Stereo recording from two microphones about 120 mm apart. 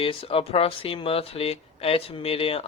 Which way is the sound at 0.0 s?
50° left (ahead or behind).